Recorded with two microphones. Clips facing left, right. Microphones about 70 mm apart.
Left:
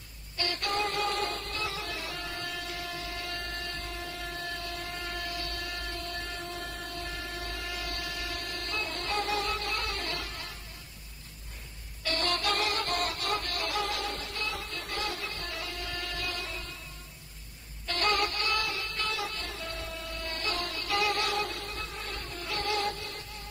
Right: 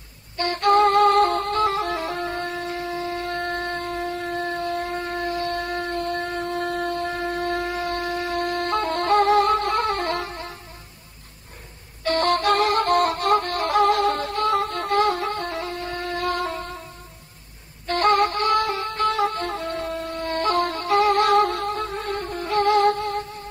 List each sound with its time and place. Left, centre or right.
0.4 s music: right
10.2 s music: right
12.0 s music: right
17.8 s music: right